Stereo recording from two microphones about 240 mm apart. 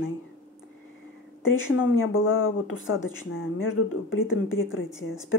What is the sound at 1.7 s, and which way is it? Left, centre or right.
Speech, left.